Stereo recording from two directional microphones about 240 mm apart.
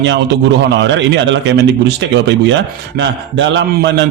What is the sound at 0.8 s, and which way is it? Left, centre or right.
Speech, right.